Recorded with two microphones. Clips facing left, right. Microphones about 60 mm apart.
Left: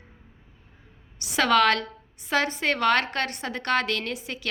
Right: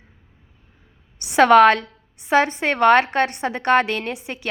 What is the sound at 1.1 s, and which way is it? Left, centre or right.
Speech, centre.